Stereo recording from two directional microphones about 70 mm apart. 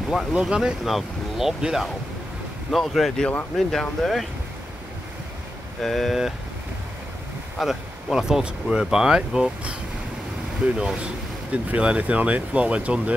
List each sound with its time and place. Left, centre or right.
0.3 s speech: centre
5.8 s speech: centre
7.5 s speech: centre